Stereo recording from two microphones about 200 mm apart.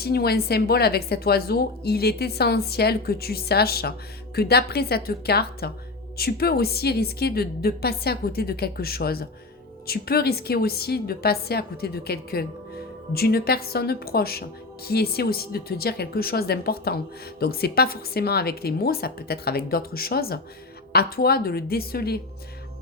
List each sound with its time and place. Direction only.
0.0 s a woman's voice: 50° left (ahead or behind)